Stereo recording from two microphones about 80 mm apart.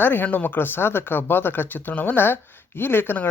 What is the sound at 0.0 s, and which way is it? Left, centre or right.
Speech, left.